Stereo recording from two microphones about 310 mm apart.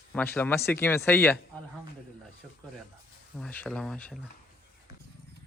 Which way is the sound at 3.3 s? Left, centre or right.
Centre.